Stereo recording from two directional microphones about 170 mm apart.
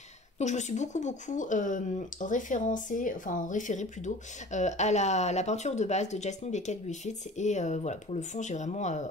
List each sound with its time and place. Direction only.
0.4 s speech: 45° left (ahead or behind)